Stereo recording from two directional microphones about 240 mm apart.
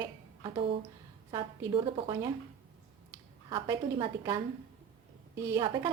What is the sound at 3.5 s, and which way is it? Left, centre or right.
Speech, centre.